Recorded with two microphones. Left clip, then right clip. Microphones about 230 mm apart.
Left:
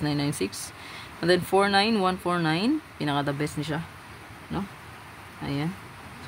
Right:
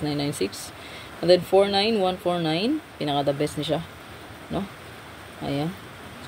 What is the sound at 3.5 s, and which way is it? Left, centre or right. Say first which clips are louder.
Speech: right 6 dB; left.